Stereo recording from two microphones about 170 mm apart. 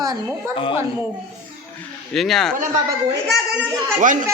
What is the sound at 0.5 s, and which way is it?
Speech, 30° left (ahead or behind).